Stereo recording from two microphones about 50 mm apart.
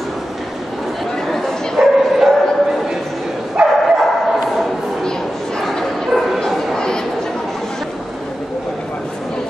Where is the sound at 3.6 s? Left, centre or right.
Centre.